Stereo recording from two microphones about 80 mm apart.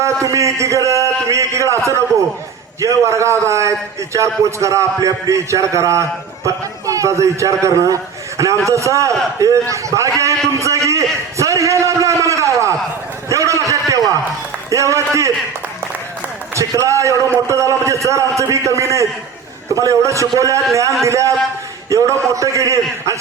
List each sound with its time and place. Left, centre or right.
0.0 s a man's voice: right
10.2 s a sound: right
14.7 s a man's voice: right
16.6 s a man's voice: right